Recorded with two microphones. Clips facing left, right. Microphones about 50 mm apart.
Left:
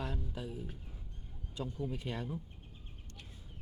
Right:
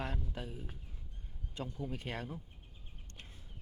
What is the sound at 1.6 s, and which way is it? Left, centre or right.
Speech, right.